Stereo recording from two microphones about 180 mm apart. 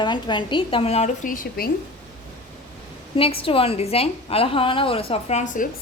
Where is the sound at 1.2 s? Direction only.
55° left (ahead or behind).